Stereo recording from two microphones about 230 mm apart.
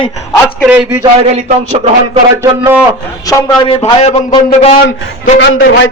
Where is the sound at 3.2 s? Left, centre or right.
Left.